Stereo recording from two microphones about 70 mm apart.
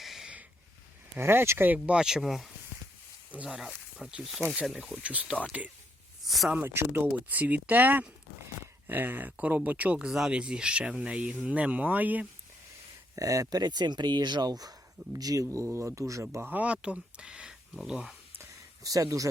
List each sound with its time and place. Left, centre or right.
0.0 s a sound: centre
1.2 s speech: right
2.0 s speech: centre
3.3 s speech: centre
5.0 s speech: centre
6.2 s speech: centre
6.6 s speech: right
10.1 s speech: centre; by 12.2 s right
13.1 s speech: right
16.2 s speech: right
16.6 s speech: centre
18.8 s speech: right